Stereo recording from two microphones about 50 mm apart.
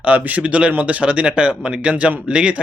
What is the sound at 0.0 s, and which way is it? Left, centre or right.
Speech, right.